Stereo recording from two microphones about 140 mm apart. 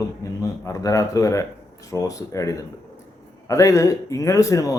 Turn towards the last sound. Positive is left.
turn(degrees=25)  # may be behind; listen again after turning